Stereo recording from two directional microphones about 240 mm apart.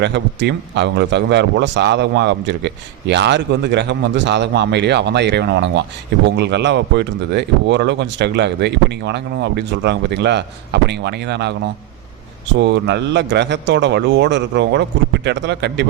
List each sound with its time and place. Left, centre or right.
0.0 s a man's voice: right
12.5 s a man's voice: right